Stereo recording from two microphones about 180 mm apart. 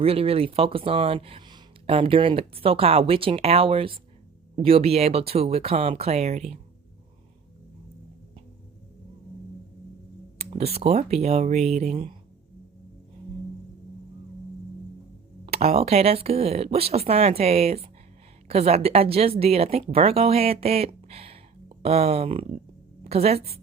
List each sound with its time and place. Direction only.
0.0 s a woman's voice: 30° right (ahead or behind)
10.3 s a woman's voice: 35° right (ahead or behind)
15.4 s a woman's voice: 35° right (ahead or behind)